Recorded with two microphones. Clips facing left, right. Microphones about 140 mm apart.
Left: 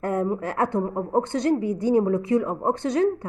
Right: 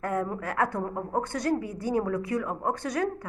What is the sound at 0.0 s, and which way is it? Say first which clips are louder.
A woman's voice: left 5 dB; 25° left (ahead or behind).